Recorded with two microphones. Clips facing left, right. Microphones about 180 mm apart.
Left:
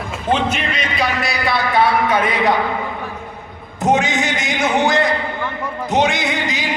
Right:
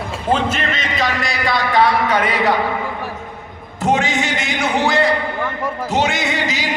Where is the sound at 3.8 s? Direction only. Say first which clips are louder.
Left 1 dB; 20° left (ahead or behind).